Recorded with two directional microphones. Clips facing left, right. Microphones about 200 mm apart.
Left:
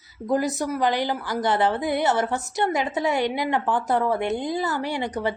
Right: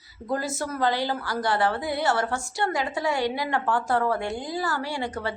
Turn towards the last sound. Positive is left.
turn(degrees=20)  # may be behind; listen again after turning